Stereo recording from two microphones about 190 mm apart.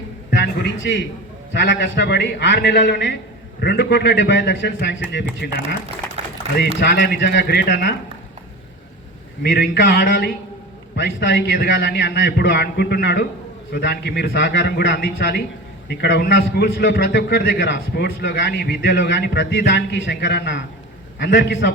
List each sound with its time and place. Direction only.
0.3 s a sound: 60° left (ahead or behind)
1.5 s a man's voice: 70° left (ahead or behind)
5.4 s a man's voice: 55° left (ahead or behind)
6.6 s a man's voice: 60° left (ahead or behind)
9.4 s a man's voice: 55° left (ahead or behind)
10.9 s a man's voice: 65° left (ahead or behind)